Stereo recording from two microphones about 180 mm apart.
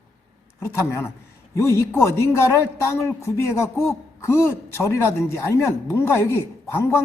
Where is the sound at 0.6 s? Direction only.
15° left (ahead or behind).